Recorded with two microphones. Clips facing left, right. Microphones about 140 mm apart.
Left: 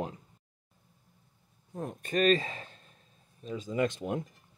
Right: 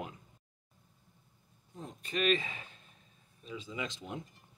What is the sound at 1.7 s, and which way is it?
Speech, 55° left (ahead or behind).